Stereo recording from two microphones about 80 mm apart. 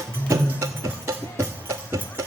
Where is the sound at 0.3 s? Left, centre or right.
Right.